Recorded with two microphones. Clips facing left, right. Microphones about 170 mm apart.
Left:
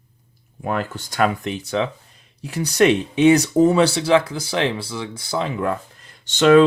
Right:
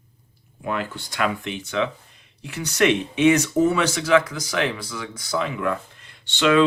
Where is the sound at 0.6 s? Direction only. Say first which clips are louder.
Left 3 dB; 45° left (ahead or behind).